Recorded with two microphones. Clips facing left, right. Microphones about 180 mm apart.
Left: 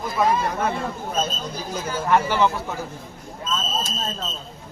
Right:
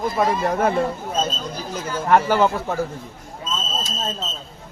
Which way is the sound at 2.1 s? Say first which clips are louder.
Right 3 dB; 45° right (ahead or behind).